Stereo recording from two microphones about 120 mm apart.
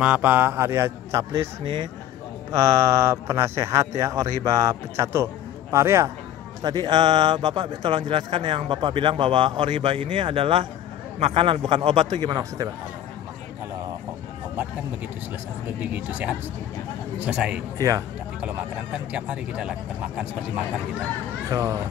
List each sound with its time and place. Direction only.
0.0 s speech: 10° right (ahead or behind)
2.5 s speech: 25° right (ahead or behind)
6.6 s a man's voice: 35° right (ahead or behind)
15.8 s speech: 15° right (ahead or behind)
17.7 s speech: 30° right (ahead or behind)
19.1 s speech: 10° right (ahead or behind)
21.5 s speech: 30° right (ahead or behind)